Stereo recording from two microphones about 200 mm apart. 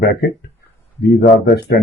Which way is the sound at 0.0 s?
55° left (ahead or behind).